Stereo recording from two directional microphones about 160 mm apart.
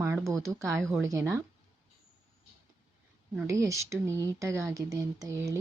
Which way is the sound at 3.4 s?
20° right (ahead or behind).